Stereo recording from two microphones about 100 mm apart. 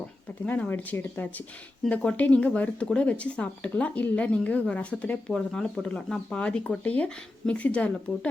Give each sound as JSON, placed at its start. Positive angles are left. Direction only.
{"t": 0.4, "sound": "speech", "side_deg": 15}